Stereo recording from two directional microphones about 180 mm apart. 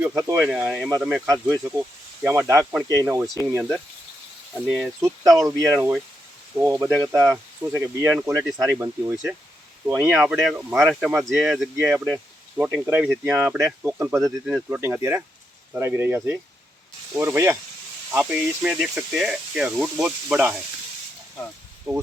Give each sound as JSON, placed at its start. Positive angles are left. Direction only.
{"t": 0.0, "sound": "speech", "side_deg": -15}
{"t": 4.5, "sound": "speech", "side_deg": -5}
{"t": 5.4, "sound": "speech", "side_deg": -15}
{"t": 12.1, "sound": "speech", "side_deg": -15}
{"t": 14.2, "sound": "speech", "side_deg": 0}